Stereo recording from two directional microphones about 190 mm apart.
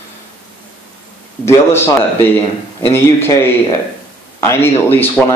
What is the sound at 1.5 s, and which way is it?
A man's voice, 15° left (ahead or behind).